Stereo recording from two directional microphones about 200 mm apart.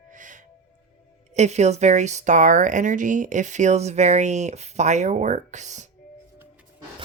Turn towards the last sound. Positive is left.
turn(degrees=-35)  # may be behind; listen again after turning